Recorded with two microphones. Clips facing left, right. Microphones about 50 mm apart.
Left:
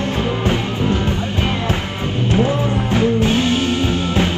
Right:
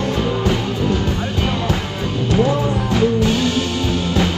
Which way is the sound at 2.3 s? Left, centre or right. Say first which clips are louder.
Right 1 dB; left.